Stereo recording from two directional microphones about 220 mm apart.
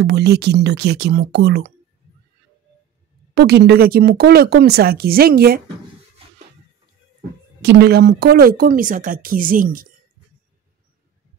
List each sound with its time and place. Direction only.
0.0 s speech: 50° right (ahead or behind)
3.3 s speech: 50° right (ahead or behind)
7.6 s speech: 50° right (ahead or behind)